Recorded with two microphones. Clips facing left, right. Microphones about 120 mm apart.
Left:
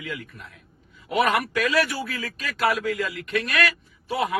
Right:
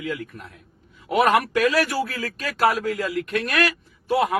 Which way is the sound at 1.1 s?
50° right (ahead or behind).